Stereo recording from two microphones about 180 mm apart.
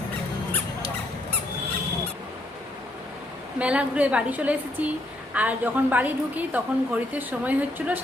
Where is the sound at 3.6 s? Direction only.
5° right (ahead or behind).